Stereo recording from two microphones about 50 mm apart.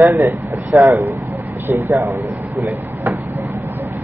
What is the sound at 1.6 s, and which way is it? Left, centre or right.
Speech, right.